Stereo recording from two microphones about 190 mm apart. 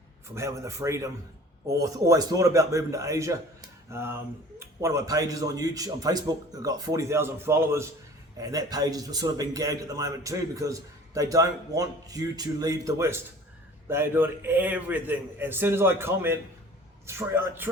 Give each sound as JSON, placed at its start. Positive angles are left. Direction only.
{"t": 0.3, "sound": "a man's voice", "side_deg": -15}